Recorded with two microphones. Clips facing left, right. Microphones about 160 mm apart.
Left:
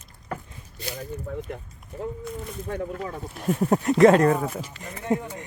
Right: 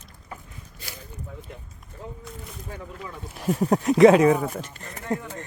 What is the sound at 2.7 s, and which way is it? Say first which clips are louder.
Speech: left 8 dB; 60° left (ahead or behind).